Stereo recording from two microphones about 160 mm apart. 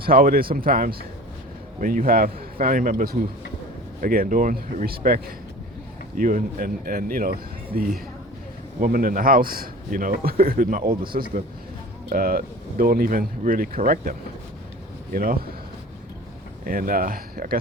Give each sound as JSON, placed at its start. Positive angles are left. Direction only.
{"t": 0.0, "sound": "a man's voice", "side_deg": -65}
{"t": 16.6, "sound": "a man's voice", "side_deg": -65}